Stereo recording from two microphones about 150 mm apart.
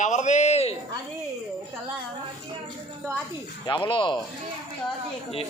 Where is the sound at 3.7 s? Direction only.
35° left (ahead or behind).